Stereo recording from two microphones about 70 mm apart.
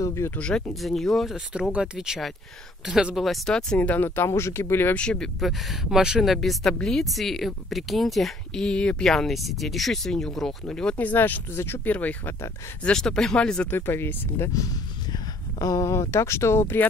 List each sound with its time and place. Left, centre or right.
0.0 s speech: left
0.4 s speech: centre
0.8 s speech: centre
1.3 s speech: centre
3.4 s speech: centre; by 4.9 s left
4.9 s speech: centre
5.4 s speech: centre
11.0 s speech: left
12.8 s speech: centre
13.7 s speech: left
15.1 s a sound: left
15.8 s speech: left